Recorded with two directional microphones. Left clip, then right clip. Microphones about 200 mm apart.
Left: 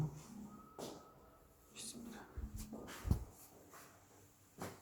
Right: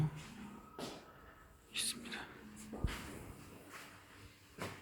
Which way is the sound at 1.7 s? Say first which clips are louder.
Right 11 dB; 5° right (ahead or behind).